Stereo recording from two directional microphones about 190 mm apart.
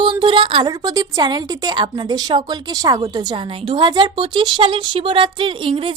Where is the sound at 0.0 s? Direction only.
25° right (ahead or behind).